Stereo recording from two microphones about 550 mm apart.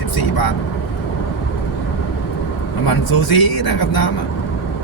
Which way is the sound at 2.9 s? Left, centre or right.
Left.